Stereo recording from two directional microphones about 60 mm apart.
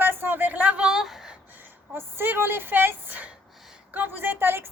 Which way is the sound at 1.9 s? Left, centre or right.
Right.